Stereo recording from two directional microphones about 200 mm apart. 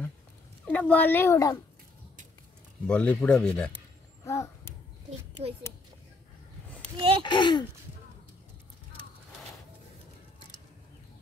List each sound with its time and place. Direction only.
0.7 s speech: 5° left (ahead or behind)
2.9 s speech: 5° left (ahead or behind)
4.2 s a sound: 15° left (ahead or behind)
7.0 s speech: 25° right (ahead or behind)
7.2 s speech: 25° left (ahead or behind)